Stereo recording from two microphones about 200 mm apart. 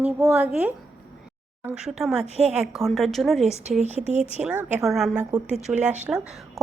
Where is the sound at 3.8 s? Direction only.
35° right (ahead or behind).